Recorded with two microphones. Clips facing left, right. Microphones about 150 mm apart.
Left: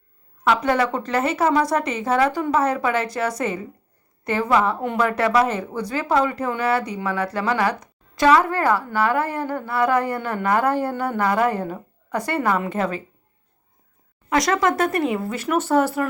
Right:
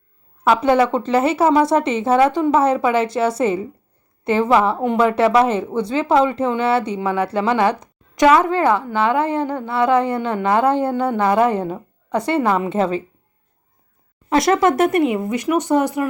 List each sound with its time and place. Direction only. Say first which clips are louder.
0.4 s speech: right 5 dB; 25° right (ahead or behind)
14.3 s speech: right 4 dB; 25° right (ahead or behind)